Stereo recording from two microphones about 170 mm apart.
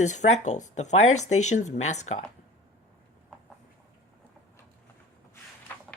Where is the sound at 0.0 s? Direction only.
45° left (ahead or behind).